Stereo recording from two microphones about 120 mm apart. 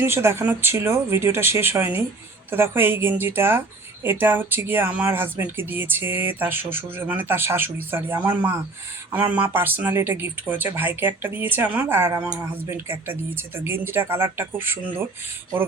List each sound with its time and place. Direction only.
0.0 s speech: 20° right (ahead or behind)